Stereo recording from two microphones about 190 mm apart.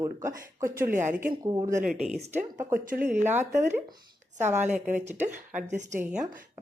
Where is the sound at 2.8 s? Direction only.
50° right (ahead or behind).